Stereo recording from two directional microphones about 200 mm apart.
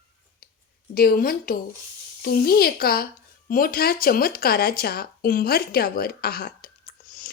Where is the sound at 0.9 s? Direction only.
50° left (ahead or behind).